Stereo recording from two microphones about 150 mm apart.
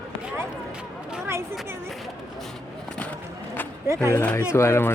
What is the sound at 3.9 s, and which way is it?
Speech, 20° right (ahead or behind).